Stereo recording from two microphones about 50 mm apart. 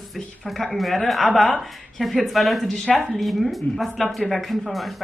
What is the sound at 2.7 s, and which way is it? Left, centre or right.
Speech, centre.